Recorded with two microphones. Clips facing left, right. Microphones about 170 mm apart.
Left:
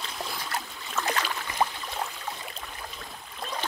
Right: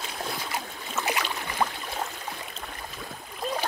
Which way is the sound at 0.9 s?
15° right (ahead or behind).